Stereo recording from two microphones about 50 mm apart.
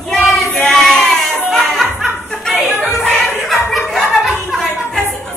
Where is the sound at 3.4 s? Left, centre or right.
Centre.